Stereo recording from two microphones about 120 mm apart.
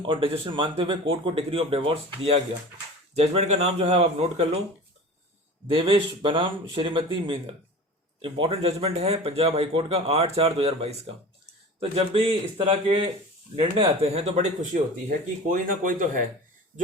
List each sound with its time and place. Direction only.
0.0 s speech: 45° right (ahead or behind)
3.2 s a man's voice: 65° right (ahead or behind)
5.7 s a man's voice: 45° right (ahead or behind); by 14.8 s 80° right
15.4 s speech: 90° right